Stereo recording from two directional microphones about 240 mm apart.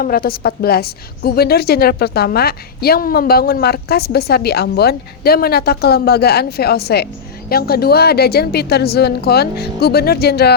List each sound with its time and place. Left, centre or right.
0.0 s a woman's voice: left